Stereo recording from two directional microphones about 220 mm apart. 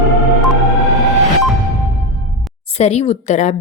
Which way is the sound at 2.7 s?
30° left (ahead or behind).